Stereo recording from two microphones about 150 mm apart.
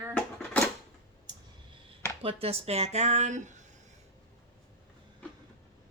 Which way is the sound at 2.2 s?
40° right (ahead or behind).